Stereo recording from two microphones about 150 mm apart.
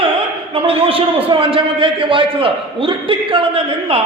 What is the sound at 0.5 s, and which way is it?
A man's voice, 40° right (ahead or behind).